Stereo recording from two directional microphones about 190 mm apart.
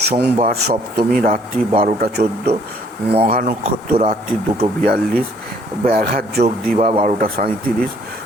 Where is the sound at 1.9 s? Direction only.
50° right (ahead or behind).